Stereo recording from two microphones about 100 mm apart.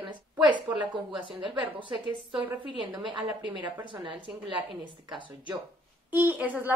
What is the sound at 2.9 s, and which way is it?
Speech, 50° right (ahead or behind).